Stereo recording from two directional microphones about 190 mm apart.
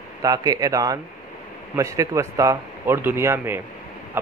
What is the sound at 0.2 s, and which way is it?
A man's voice, 20° right (ahead or behind).